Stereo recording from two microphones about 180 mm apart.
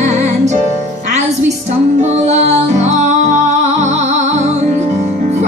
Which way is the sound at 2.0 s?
35° right (ahead or behind).